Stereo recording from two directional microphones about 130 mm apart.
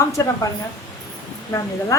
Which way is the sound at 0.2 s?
25° left (ahead or behind).